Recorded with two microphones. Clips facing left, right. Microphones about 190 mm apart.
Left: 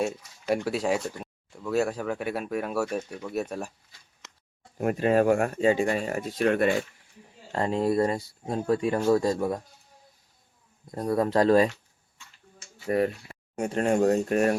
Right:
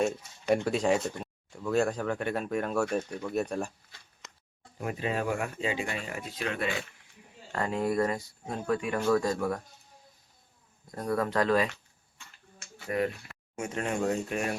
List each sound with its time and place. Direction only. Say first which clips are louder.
0.4 s speech: even; 5° left (ahead or behind)
4.8 s speech: left 9 dB; 50° left (ahead or behind)
7.5 s speech: left 4 dB; 30° left (ahead or behind)
10.9 s speech: left 5 dB; 25° left (ahead or behind)
12.9 s speech: left 5 dB; 35° left (ahead or behind)